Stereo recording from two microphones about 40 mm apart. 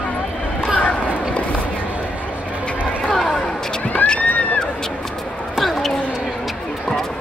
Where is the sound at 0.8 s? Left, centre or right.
Left.